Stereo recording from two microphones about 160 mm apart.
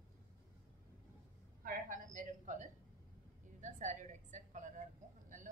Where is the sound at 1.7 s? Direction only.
55° right (ahead or behind).